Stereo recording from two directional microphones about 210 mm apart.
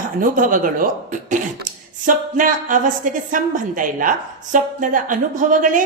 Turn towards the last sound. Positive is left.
turn(degrees=-40)  # may be behind; listen again after turning